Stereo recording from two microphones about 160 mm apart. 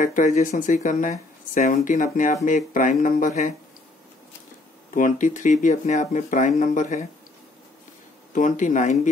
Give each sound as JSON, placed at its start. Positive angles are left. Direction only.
{"t": 0.0, "sound": "speech", "side_deg": 55}
{"t": 4.9, "sound": "speech", "side_deg": 55}
{"t": 8.4, "sound": "speech", "side_deg": 50}